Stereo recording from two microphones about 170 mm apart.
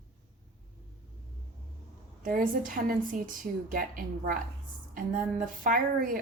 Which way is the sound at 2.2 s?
50° right (ahead or behind).